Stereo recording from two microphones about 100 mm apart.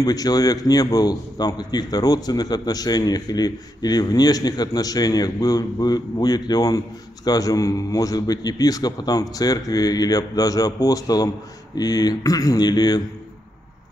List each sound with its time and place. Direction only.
0.0 s a man's voice: 40° left (ahead or behind)